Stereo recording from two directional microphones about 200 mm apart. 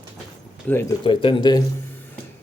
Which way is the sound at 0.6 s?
10° left (ahead or behind).